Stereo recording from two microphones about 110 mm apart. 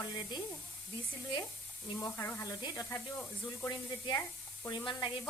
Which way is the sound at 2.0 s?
25° left (ahead or behind).